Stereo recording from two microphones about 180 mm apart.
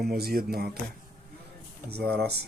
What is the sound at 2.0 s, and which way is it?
Speech, 60° right (ahead or behind).